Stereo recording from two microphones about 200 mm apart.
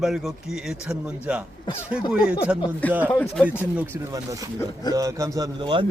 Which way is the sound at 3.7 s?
10° right (ahead or behind).